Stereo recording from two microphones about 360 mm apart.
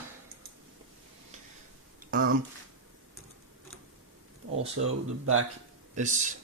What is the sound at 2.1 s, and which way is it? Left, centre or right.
Speech, right.